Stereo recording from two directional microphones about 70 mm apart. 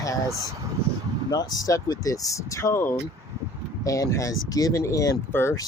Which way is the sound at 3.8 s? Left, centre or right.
Left.